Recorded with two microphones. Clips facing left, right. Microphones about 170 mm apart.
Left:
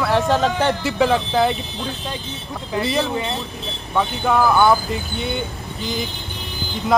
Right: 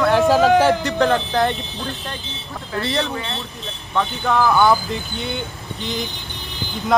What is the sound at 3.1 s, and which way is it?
Speech, 15° left (ahead or behind).